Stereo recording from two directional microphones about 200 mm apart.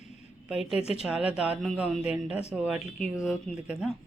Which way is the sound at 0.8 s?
30° left (ahead or behind).